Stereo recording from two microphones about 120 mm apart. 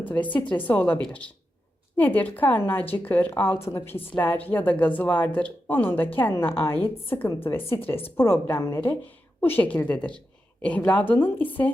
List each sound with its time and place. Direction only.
0.0 s speech: 15° left (ahead or behind)
2.0 s a woman's voice: 15° left (ahead or behind)